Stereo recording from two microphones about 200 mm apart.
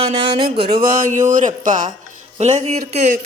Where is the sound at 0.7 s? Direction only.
45° right (ahead or behind).